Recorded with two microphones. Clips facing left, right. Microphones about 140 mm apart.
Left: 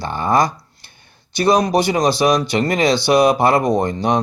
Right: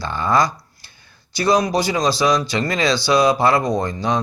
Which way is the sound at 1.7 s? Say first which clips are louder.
Left 3 dB; 60° left (ahead or behind).